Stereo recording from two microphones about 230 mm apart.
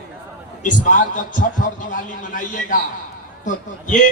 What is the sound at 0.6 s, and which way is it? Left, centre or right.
A man's voice, left.